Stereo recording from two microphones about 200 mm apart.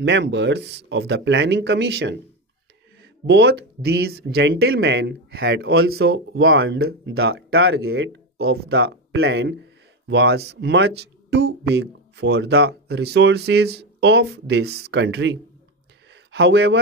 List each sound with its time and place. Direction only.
0.0 s speech: 65° right (ahead or behind)
3.3 s speech: 60° right (ahead or behind)
7.9 s speech: 75° right (ahead or behind)
8.4 s speech: 55° right (ahead or behind)